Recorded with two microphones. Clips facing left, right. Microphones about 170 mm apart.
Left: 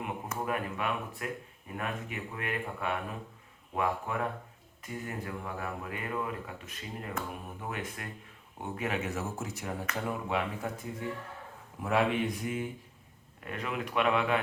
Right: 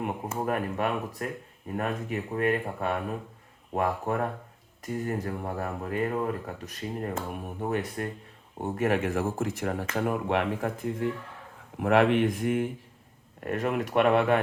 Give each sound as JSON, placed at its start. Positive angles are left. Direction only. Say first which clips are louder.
{"t": 0.4, "sound": "speech", "louder": "right 5 dB", "side_deg": -45}
{"t": 13.4, "sound": "speech", "louder": "right 8 dB", "side_deg": -50}